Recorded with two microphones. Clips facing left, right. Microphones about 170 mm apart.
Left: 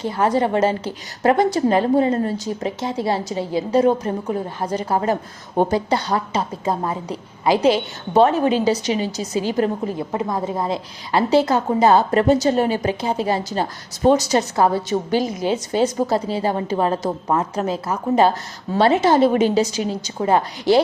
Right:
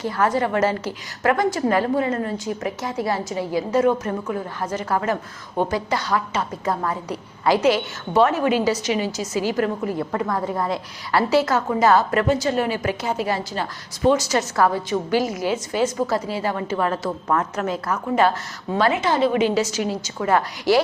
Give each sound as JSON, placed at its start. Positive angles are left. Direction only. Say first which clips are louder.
{"t": 0.0, "sound": "a woman's voice", "louder": "left 2 dB", "side_deg": 25}
{"t": 12.3, "sound": "a woman's voice", "louder": "left 4 dB", "side_deg": 35}
{"t": 14.5, "sound": "a woman's voice", "louder": "even", "side_deg": 25}
{"t": 15.5, "sound": "a woman's voice", "louder": "left 4 dB", "side_deg": 35}
{"t": 19.1, "sound": "a woman's voice", "louder": "left 3 dB", "side_deg": 45}